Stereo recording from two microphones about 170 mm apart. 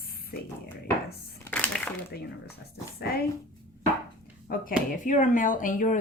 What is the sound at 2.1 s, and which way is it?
Speech, 70° left (ahead or behind).